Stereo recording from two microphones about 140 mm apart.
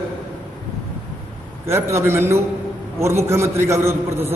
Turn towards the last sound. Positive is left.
turn(degrees=-20)  # may be behind; listen again after turning